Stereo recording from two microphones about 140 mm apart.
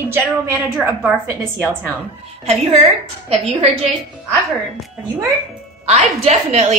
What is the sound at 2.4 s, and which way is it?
A woman's voice, 50° right (ahead or behind).